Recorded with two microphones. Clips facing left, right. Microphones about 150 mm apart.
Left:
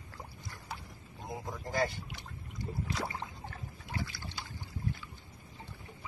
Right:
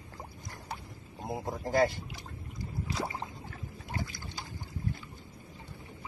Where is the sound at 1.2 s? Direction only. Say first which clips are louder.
Right 5 dB; 35° right (ahead or behind).